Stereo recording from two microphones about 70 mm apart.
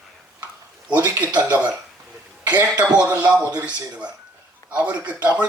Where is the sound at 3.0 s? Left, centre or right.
Right.